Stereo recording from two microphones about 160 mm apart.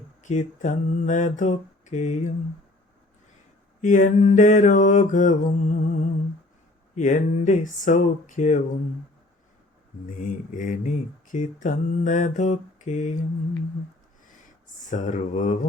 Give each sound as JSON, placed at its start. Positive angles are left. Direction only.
{"t": 0.2, "sound": "mantra", "side_deg": 50}
{"t": 3.8, "sound": "mantra", "side_deg": 55}
{"t": 7.0, "sound": "mantra", "side_deg": 50}
{"t": 10.1, "sound": "mantra", "side_deg": 55}
{"t": 14.8, "sound": "mantra", "side_deg": 50}